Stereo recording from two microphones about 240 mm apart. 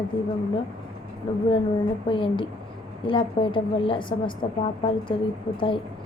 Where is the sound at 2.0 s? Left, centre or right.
Left.